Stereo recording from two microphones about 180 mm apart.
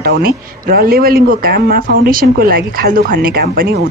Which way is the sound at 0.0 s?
55° right (ahead or behind).